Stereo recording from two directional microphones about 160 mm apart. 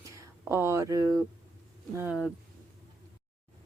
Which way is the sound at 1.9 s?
10° right (ahead or behind).